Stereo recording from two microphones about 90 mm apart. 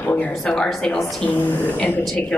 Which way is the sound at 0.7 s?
Centre (ahead or behind).